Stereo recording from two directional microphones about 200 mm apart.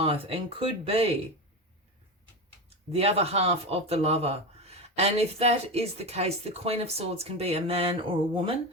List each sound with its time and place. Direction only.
0.0 s speech: 30° right (ahead or behind)
2.6 s speech: 30° right (ahead or behind)